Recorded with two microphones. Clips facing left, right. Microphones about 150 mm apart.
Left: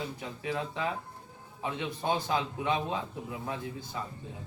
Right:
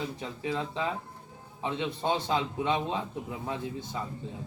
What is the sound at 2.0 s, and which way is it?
Speech, 25° right (ahead or behind).